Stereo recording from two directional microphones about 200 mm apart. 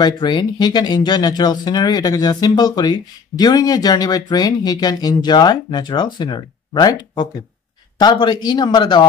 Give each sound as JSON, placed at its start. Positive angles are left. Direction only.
{"t": 0.0, "sound": "speech", "side_deg": 20}